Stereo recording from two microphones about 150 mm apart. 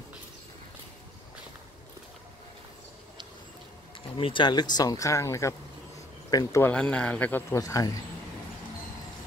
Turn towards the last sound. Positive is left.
turn(degrees=25)  # may be behind; listen again after turning